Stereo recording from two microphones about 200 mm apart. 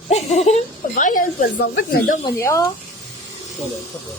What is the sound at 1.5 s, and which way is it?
Speech, 60° left (ahead or behind).